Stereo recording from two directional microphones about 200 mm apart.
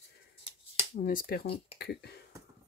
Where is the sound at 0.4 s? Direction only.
30° left (ahead or behind).